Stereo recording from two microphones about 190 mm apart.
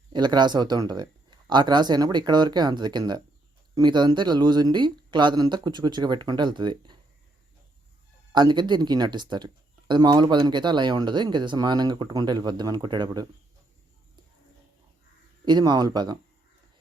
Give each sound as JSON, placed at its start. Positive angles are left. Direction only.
{"t": 0.1, "sound": "speech", "side_deg": -25}
{"t": 8.3, "sound": "speech", "side_deg": -25}
{"t": 15.4, "sound": "speech", "side_deg": -20}